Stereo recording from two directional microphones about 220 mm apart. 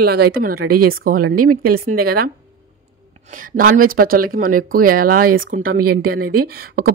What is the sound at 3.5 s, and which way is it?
Speech, 40° right (ahead or behind).